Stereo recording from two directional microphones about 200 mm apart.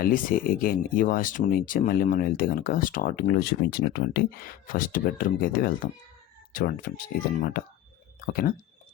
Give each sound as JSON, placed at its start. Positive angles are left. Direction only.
{"t": 0.0, "sound": "speech", "side_deg": 45}